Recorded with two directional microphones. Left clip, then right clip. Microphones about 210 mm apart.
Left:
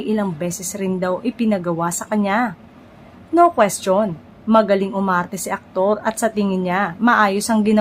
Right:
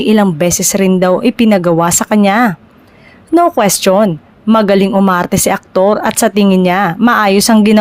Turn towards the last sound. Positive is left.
turn(degrees=-45)  # may be behind; listen again after turning